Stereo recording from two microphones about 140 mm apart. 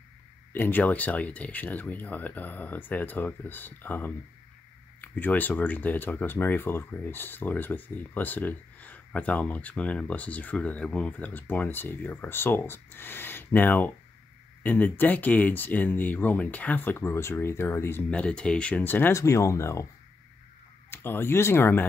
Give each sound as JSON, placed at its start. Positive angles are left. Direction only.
{"t": 0.5, "sound": "speech", "side_deg": 15}
{"t": 20.9, "sound": "speech", "side_deg": 15}